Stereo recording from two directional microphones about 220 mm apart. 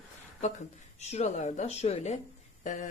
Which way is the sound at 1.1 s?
30° left (ahead or behind).